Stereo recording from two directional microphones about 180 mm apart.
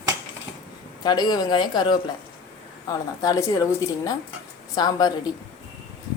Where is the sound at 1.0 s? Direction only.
25° left (ahead or behind).